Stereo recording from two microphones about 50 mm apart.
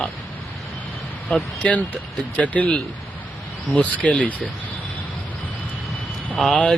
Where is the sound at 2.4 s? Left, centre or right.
Left.